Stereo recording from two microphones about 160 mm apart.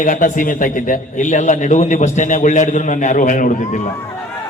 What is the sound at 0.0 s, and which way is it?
A man's voice, 55° left (ahead or behind).